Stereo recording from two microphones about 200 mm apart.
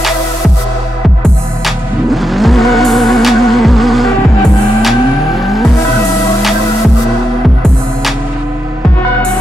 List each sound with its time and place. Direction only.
2.0 s music: centre (ahead or behind)
5.4 s music: centre (ahead or behind)